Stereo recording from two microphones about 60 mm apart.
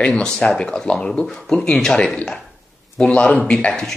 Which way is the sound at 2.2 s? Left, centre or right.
Centre.